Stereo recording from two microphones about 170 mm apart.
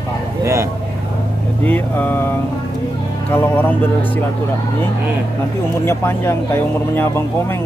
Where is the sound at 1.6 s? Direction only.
10° left (ahead or behind).